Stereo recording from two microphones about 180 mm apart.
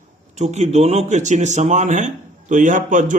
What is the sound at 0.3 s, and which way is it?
A man's voice, 40° right (ahead or behind).